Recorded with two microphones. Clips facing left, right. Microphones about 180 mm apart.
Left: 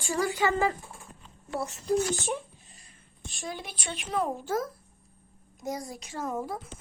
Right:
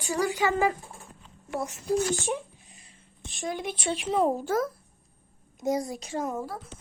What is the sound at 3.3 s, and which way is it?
Speech, 20° right (ahead or behind).